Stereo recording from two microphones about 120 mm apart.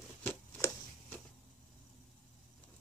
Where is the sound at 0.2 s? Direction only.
15° left (ahead or behind).